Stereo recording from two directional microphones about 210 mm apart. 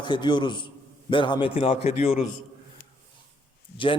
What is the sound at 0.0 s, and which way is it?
A man's voice, 20° left (ahead or behind).